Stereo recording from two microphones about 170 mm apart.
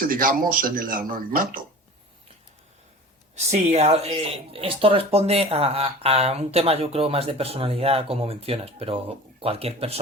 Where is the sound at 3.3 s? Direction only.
40° right (ahead or behind).